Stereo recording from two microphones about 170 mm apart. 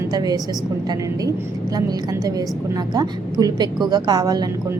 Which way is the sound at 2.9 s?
25° right (ahead or behind).